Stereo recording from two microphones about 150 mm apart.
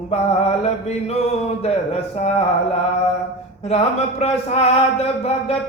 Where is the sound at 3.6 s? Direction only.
45° left (ahead or behind).